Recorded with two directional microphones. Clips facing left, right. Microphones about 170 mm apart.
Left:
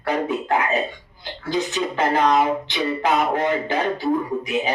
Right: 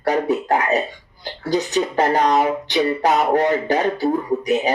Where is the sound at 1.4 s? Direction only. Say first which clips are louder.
Right 4 dB; 40° right (ahead or behind).